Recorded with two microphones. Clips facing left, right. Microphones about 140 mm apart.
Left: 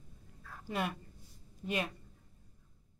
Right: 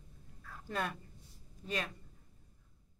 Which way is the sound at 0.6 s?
10° left (ahead or behind).